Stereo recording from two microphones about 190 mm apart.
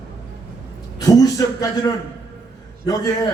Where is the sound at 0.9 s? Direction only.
20° left (ahead or behind).